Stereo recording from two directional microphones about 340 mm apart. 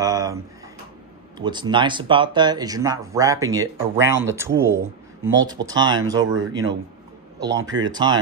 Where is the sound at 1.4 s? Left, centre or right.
Centre.